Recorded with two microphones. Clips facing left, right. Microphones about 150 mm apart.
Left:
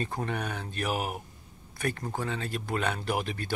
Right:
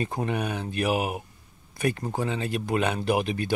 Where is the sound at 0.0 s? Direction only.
15° right (ahead or behind).